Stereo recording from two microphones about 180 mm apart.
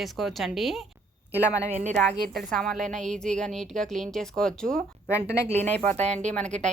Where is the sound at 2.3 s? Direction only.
Centre (ahead or behind).